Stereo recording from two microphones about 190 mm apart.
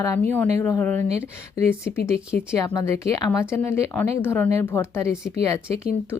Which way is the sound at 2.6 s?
20° left (ahead or behind).